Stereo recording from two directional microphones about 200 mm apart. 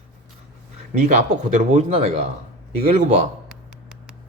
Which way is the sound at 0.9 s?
40° right (ahead or behind).